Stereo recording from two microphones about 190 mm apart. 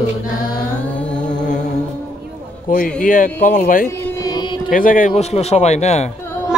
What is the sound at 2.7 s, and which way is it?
Speech, 45° left (ahead or behind).